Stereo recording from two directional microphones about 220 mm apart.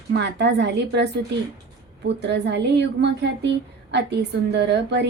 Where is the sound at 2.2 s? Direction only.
50° right (ahead or behind).